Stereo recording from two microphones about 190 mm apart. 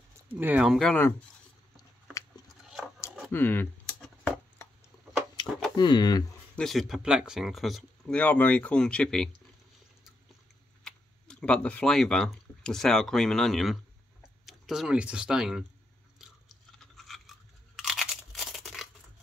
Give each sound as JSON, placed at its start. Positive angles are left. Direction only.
{"t": 0.3, "sound": "speech", "side_deg": -10}
{"t": 2.4, "sound": "biting", "side_deg": 0}
{"t": 3.3, "sound": "speech", "side_deg": 10}
{"t": 5.3, "sound": "a sound", "side_deg": 25}
{"t": 6.5, "sound": "speech", "side_deg": 0}
{"t": 10.8, "sound": "speech", "side_deg": 5}
{"t": 16.2, "sound": "a sound", "side_deg": 0}
{"t": 17.7, "sound": "crunch", "side_deg": 0}